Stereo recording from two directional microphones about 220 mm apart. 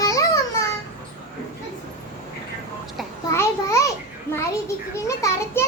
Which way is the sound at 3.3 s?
10° left (ahead or behind).